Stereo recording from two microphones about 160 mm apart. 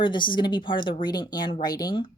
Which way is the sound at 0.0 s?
30° left (ahead or behind).